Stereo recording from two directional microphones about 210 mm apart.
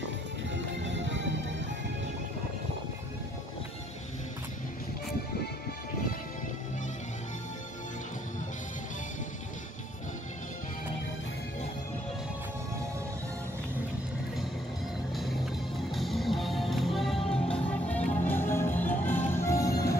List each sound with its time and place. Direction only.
0.8 s music: 60° right (ahead or behind)
15.9 s music: centre (ahead or behind); by 20.0 s 15° left (ahead or behind)